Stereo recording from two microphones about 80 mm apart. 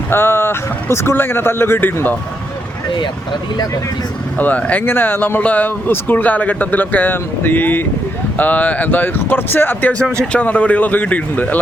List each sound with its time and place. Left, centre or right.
0.1 s speech: left
4.4 s speech: centre